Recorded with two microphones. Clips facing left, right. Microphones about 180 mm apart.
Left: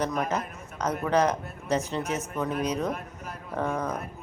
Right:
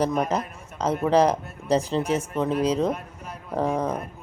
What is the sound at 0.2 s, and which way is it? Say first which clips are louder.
Speech: right 4 dB; 35° right (ahead or behind).